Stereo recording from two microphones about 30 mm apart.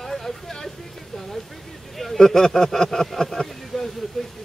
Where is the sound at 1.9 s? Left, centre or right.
Centre.